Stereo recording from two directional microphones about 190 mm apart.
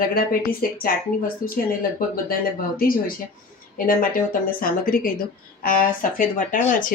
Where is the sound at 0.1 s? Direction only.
50° left (ahead or behind).